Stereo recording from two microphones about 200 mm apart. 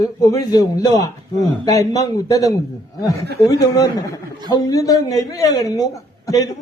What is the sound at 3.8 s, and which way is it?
A man's voice, 20° left (ahead or behind).